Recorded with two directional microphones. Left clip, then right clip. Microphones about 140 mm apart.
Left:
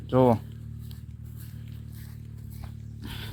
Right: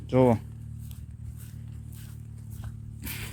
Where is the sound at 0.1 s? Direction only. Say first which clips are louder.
Left 1 dB; 15° right (ahead or behind).